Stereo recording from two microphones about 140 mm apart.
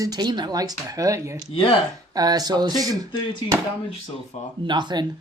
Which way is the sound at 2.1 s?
25° right (ahead or behind).